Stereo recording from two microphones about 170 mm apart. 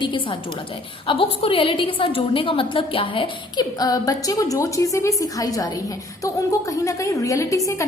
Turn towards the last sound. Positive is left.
turn(degrees=20)  # may be behind; listen again after turning